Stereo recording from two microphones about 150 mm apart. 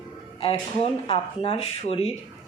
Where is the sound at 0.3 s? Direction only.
35° left (ahead or behind).